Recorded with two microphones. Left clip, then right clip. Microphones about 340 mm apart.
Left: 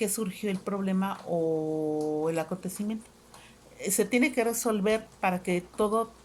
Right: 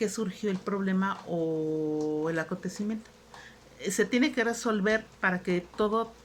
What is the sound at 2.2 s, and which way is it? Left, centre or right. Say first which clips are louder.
Speech: left 1 dB; centre.